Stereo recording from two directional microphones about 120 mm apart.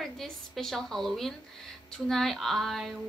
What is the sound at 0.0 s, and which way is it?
Speech, centre (ahead or behind).